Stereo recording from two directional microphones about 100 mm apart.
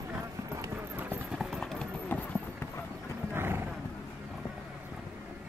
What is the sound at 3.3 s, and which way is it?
Wild animals, 25° right (ahead or behind).